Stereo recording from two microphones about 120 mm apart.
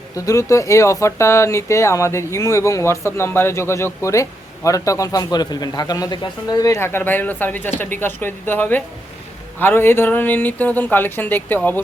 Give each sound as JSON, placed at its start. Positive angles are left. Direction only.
{"t": 0.3, "sound": "speech", "side_deg": 25}